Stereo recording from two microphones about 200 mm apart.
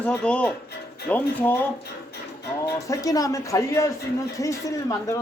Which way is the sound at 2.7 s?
15° left (ahead or behind).